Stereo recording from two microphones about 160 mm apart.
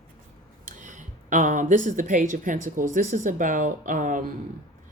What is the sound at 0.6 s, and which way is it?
A woman's voice, 50° right (ahead or behind).